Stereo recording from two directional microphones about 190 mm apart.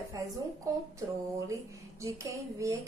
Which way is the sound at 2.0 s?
15° right (ahead or behind).